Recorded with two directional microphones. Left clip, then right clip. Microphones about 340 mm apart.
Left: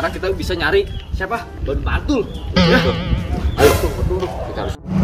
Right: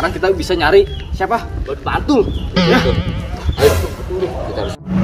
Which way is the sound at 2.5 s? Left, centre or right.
Centre.